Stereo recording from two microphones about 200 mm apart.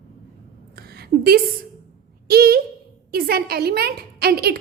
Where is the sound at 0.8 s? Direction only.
50° right (ahead or behind).